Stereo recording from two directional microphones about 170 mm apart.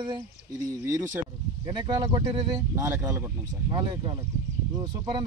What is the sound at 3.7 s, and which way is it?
Speech, 30° right (ahead or behind).